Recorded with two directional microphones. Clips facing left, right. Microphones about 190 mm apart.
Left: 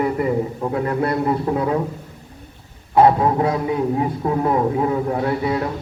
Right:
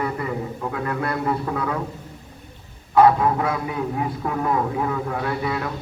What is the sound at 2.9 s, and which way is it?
A man's voice, 30° left (ahead or behind).